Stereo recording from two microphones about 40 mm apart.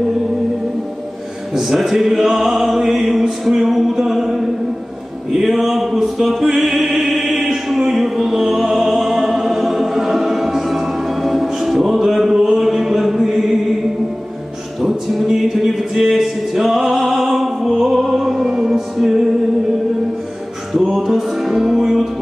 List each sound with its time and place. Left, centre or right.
1.5 s music: centre
14.8 s music: centre
20.8 s music: centre